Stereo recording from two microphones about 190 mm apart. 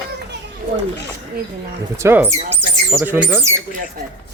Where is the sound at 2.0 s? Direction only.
10° right (ahead or behind).